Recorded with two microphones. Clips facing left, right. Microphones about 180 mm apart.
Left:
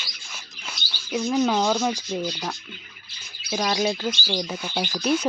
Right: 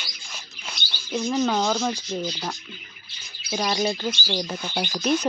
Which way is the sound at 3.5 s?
Centre (ahead or behind).